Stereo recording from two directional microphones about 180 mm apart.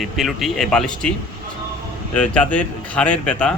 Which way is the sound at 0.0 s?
Centre (ahead or behind).